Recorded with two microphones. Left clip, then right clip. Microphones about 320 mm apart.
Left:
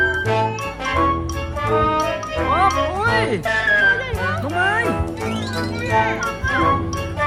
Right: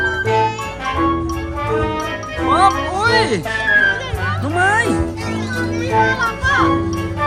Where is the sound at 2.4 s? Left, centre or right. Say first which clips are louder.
Right 4 dB; centre.